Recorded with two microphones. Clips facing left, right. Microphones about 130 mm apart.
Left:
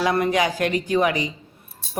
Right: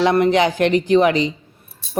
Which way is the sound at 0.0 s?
25° right (ahead or behind).